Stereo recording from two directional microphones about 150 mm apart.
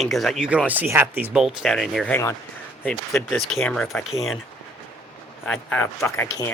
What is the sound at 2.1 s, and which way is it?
Speech, 20° left (ahead or behind).